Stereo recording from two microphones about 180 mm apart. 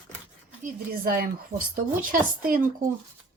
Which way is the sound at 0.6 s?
55° right (ahead or behind).